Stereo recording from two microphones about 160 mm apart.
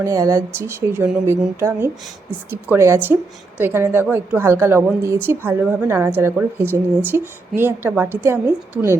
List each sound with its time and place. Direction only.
0.0 s a woman's voice: 20° right (ahead or behind)